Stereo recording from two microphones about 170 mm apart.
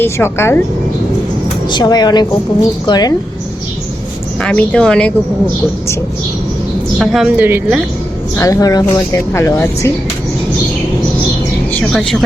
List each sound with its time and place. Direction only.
0.0 s a woman's voice: 15° left (ahead or behind)
1.7 s a woman's voice: 25° left (ahead or behind)
4.4 s a woman's voice: 5° left (ahead or behind)
7.0 s a woman's voice: centre (ahead or behind)
8.4 s a woman's voice: 20° left (ahead or behind)
11.7 s speech: 5° left (ahead or behind)